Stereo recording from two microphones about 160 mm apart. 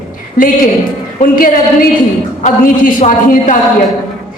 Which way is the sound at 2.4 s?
50° left (ahead or behind).